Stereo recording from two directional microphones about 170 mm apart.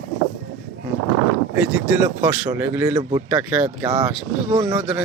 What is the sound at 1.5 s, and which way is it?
Speech, 10° right (ahead or behind).